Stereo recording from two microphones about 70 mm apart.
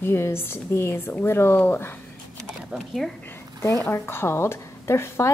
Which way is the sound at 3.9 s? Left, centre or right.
Left.